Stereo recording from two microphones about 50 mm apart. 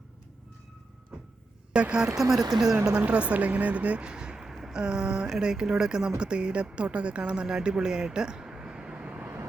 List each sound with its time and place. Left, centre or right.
1.1 s music: centre
1.7 s speech: centre
2.3 s speech: centre
3.0 s speech: right
9.1 s vehicle: right